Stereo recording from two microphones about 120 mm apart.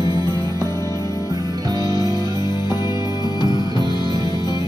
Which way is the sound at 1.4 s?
35° right (ahead or behind).